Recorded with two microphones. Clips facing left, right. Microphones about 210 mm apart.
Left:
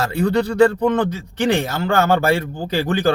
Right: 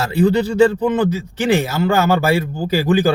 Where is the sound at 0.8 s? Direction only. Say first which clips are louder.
Right 1 dB; 5° right (ahead or behind).